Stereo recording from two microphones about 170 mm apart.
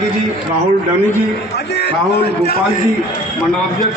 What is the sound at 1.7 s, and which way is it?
Speech, 80° left.